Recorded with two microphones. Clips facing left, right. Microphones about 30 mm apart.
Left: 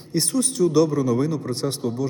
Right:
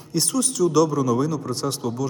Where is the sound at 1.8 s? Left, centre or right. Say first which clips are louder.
Left 2 dB; right.